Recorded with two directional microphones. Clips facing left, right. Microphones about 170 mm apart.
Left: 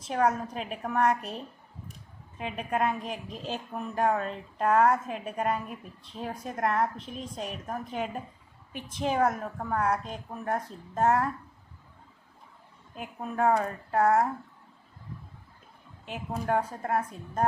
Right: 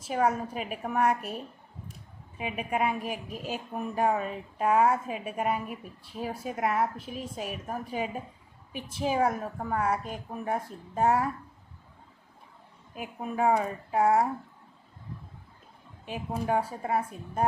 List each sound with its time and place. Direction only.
0.0 s a woman's voice: 5° right (ahead or behind)
2.4 s a woman's voice: 10° right (ahead or behind)
12.9 s a woman's voice: 10° right (ahead or behind)
16.0 s a woman's voice: 10° right (ahead or behind)